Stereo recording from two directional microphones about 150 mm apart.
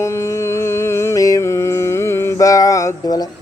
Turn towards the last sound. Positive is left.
turn(degrees=25)  # may be behind; listen again after turning